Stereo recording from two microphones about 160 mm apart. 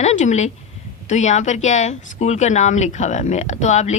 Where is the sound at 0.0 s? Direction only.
45° left (ahead or behind).